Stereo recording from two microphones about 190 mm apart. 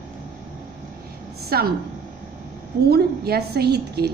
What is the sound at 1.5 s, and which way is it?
Speech, 55° right (ahead or behind).